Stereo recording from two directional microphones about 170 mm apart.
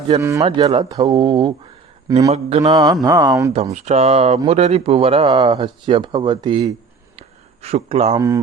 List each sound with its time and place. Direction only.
0.2 s speech: 15° right (ahead or behind)
0.4 s speech: 30° right (ahead or behind)
3.5 s speech: 40° right (ahead or behind)
7.2 s a sound: 40° right (ahead or behind)